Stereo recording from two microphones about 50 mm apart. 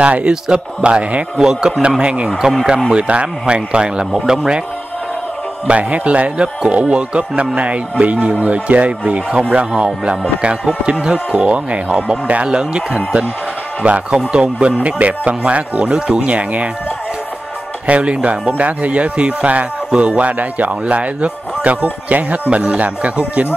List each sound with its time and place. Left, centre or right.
0.0 s speech: right
5.7 s speech: right
17.8 s speech: right